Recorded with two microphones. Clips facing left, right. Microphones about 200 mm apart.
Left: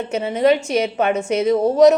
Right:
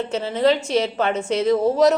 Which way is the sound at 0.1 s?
15° left (ahead or behind).